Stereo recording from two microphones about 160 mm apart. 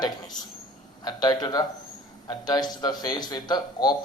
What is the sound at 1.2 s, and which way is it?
Speech, 25° left (ahead or behind).